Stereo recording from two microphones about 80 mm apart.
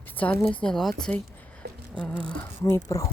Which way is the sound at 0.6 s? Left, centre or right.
Centre.